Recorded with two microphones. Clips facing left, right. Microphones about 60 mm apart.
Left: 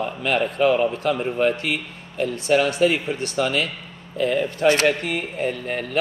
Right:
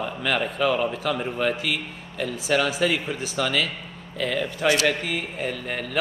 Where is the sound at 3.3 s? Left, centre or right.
Centre.